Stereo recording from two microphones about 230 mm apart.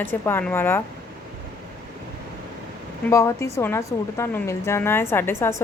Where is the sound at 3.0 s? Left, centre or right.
Centre.